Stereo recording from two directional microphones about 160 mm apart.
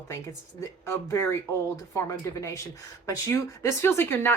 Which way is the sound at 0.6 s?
15° left (ahead or behind).